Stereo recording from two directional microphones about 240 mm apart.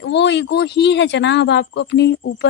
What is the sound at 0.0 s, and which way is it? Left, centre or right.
Speech, left.